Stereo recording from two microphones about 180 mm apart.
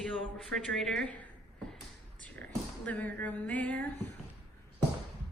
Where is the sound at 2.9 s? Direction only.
10° left (ahead or behind).